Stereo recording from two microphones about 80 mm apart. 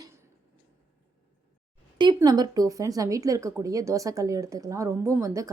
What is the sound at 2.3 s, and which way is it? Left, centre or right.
A woman's voice, right.